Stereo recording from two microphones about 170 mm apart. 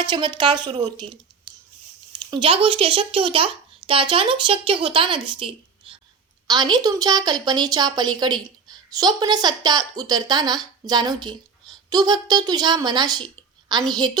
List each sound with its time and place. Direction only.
0.0 s a woman's voice: 25° right (ahead or behind)
2.3 s a child's voice: 30° right (ahead or behind)